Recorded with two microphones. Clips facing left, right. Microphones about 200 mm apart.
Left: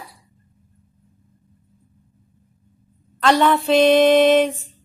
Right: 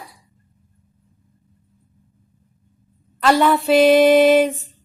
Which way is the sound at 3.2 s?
5° right (ahead or behind).